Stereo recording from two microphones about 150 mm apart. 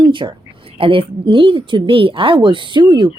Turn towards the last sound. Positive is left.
turn(degrees=-30)  # may be behind; listen again after turning